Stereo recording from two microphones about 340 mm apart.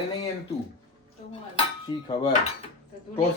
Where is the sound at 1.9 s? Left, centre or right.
Centre.